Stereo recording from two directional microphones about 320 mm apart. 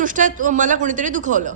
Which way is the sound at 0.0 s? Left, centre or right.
Right.